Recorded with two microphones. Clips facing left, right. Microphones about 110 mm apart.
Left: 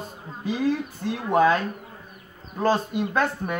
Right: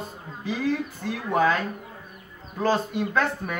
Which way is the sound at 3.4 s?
20° left (ahead or behind).